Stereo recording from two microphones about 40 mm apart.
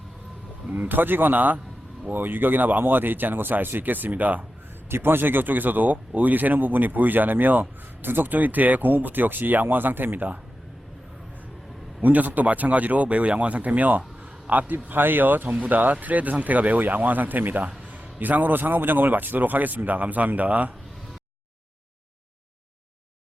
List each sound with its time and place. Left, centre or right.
0.7 s speech: right
4.9 s speech: right
12.0 s a man's voice: right
14.8 s speech: right
17.6 s a sound: right
18.2 s speech: right